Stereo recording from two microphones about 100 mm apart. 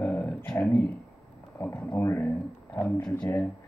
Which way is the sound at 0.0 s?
15° left (ahead or behind).